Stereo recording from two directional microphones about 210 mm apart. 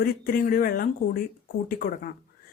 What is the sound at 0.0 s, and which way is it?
Speech, 45° left (ahead or behind).